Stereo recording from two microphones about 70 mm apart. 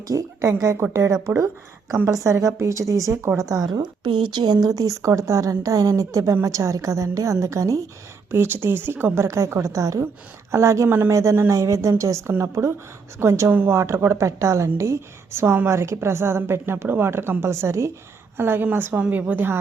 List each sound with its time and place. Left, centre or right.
0.1 s a woman's voice: right
2.0 s a woman's voice: right
4.4 s a woman's voice: right
8.3 s a woman's voice: right
9.2 s a woman's voice: right
18.3 s a woman's voice: right